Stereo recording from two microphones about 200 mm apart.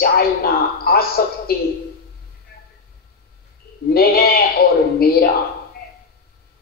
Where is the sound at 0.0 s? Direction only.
50° left (ahead or behind).